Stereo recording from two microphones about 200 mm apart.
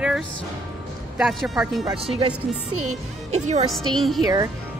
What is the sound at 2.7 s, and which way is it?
Speech, 90° right.